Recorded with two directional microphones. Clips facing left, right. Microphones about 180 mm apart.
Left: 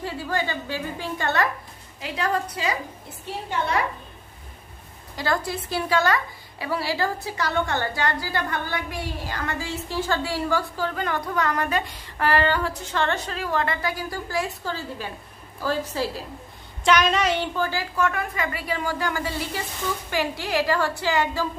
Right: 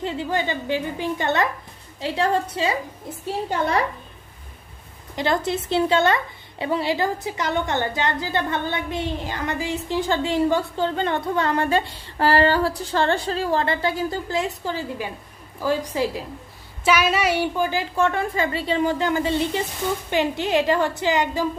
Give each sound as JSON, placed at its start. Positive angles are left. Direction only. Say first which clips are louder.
{"t": 0.0, "sound": "a woman's voice", "louder": "right 3 dB", "side_deg": -20}
{"t": 5.1, "sound": "a woman's voice", "louder": "right 4 dB", "side_deg": -20}